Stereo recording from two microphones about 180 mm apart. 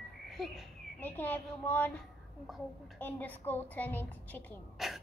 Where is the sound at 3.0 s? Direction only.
10° left (ahead or behind).